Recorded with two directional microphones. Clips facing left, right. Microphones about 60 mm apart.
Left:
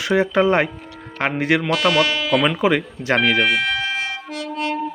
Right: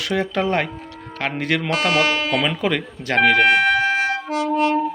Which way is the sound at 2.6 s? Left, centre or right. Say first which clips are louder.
Left 4 dB; centre.